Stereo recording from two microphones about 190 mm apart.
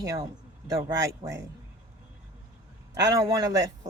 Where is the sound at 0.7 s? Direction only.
20° right (ahead or behind).